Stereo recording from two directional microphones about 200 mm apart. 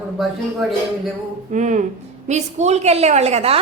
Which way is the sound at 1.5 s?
40° right (ahead or behind).